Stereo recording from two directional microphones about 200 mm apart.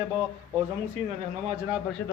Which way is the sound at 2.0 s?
10° left (ahead or behind).